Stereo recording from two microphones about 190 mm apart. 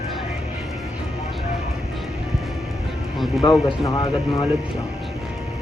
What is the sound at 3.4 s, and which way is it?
Speech, 25° left (ahead or behind).